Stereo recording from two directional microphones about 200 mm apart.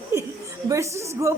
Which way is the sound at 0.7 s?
15° right (ahead or behind).